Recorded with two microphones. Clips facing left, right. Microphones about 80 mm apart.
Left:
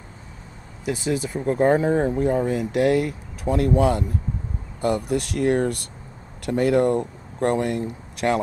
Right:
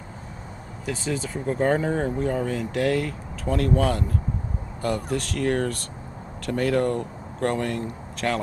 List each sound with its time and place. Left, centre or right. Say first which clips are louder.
0.8 s speech: left 4 dB; centre